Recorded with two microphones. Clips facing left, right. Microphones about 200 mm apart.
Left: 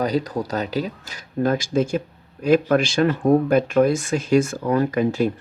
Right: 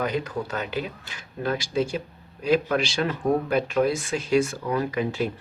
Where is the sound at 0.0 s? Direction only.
35° left (ahead or behind).